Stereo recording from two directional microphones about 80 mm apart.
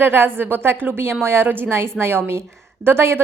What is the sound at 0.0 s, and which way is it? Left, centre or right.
A woman's voice, right.